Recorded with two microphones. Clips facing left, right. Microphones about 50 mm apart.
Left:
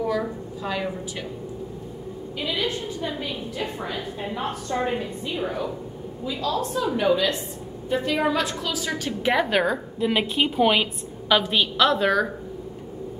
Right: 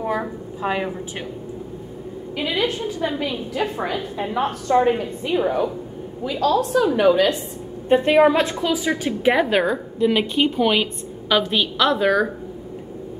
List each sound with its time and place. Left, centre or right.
0.0 s a sound: right
2.3 s a woman's voice: right
3.2 s a woman's voice: right
5.3 s a woman's voice: right
6.2 s a woman's voice: right
7.9 s a woman's voice: right; by 9.1 s centre
9.2 s a woman's voice: centre